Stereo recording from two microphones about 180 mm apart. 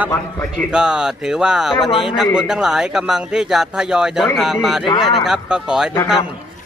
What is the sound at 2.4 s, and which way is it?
Speech, 5° right (ahead or behind).